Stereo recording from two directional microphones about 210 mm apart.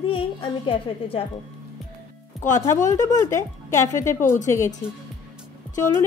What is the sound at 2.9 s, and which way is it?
Speech, 15° left (ahead or behind).